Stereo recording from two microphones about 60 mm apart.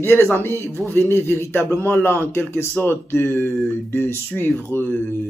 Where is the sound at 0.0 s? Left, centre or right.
Left.